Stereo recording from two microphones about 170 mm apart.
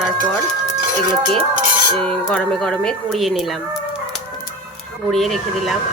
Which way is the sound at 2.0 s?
5° left (ahead or behind).